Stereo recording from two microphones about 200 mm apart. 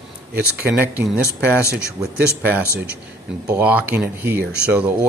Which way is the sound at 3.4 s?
10° right (ahead or behind).